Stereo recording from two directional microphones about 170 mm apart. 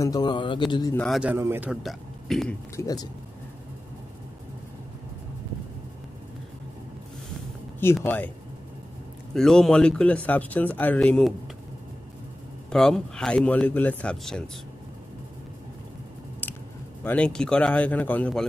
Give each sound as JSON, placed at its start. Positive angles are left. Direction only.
{"t": 0.0, "sound": "speech", "side_deg": 25}
{"t": 0.9, "sound": "speech", "side_deg": 0}
{"t": 1.3, "sound": "speech", "side_deg": -15}
{"t": 2.7, "sound": "speech", "side_deg": 20}
{"t": 7.8, "sound": "speech", "side_deg": 15}
{"t": 9.3, "sound": "speech", "side_deg": 5}
{"t": 12.6, "sound": "speech", "side_deg": 5}
{"t": 17.0, "sound": "speech", "side_deg": 10}